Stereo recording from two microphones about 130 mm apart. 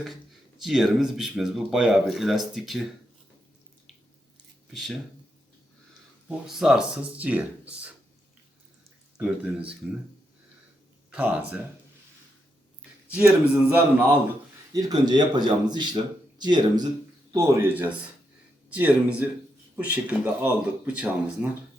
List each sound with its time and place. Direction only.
0.6 s speech: 5° right (ahead or behind)
4.7 s speech: centre (ahead or behind)
6.2 s speech: 5° right (ahead or behind)
9.1 s speech: 10° right (ahead or behind)
11.1 s speech: 10° right (ahead or behind)
13.1 s speech: 15° right (ahead or behind)
14.7 s speech: 30° right (ahead or behind)
17.3 s speech: 20° right (ahead or behind)